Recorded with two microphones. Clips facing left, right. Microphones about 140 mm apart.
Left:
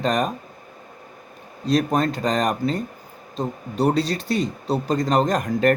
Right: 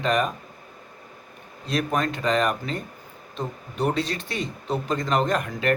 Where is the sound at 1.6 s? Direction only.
40° left (ahead or behind).